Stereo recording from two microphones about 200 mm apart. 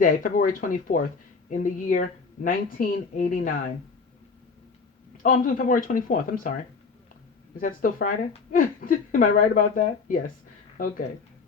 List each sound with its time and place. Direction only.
0.0 s a woman's voice: 45° left (ahead or behind)
5.2 s a woman's voice: 45° left (ahead or behind)
7.5 s a woman's voice: 45° left (ahead or behind)